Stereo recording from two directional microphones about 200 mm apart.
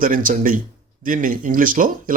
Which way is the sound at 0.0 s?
40° right (ahead or behind).